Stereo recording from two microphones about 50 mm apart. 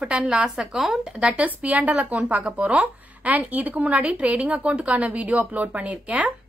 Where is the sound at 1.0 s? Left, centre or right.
Centre.